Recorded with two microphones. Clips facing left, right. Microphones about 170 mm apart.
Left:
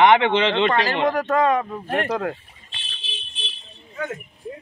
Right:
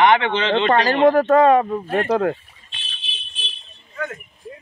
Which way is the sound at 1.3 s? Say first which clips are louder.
Right 6 dB; 35° right (ahead or behind).